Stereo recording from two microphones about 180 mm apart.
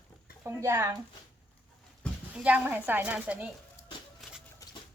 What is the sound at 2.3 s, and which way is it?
A woman's voice, 5° right (ahead or behind).